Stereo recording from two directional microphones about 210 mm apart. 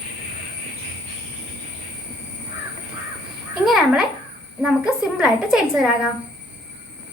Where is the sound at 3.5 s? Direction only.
Centre (ahead or behind).